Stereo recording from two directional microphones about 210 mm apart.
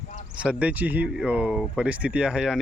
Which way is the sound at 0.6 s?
5° right (ahead or behind).